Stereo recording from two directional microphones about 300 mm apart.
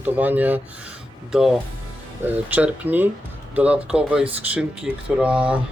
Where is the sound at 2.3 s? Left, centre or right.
Centre.